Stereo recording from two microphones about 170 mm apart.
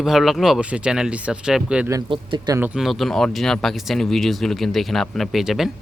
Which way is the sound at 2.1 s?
30° right (ahead or behind).